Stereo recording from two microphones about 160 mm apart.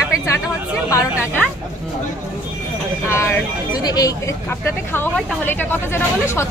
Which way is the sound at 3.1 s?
15° left (ahead or behind).